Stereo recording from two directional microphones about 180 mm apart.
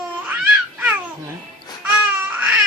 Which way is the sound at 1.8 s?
10° right (ahead or behind).